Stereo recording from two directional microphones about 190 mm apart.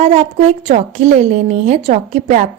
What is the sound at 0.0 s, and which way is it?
A woman's voice, 35° right (ahead or behind).